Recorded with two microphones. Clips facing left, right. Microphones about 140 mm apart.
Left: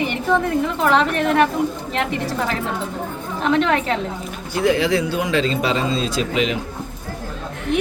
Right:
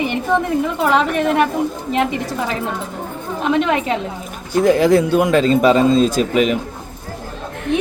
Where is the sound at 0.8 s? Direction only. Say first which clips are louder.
Right 1 dB; 10° right (ahead or behind).